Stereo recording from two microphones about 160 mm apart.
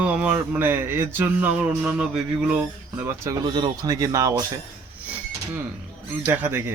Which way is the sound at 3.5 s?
30° right (ahead or behind).